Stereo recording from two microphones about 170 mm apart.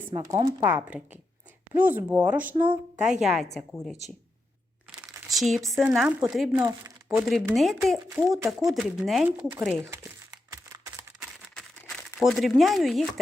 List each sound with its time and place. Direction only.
0.1 s speech: 25° right (ahead or behind); by 3.9 s centre (ahead or behind)
5.3 s speech: centre (ahead or behind)
6.6 s speech: 20° right (ahead or behind)
7.1 s speech: 5° right (ahead or behind)
9.8 s crumpling: 20° right (ahead or behind)
12.2 s speech: centre (ahead or behind)